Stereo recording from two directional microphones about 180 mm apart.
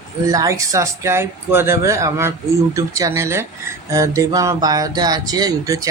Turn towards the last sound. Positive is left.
turn(degrees=-20)  # may be behind; listen again after turning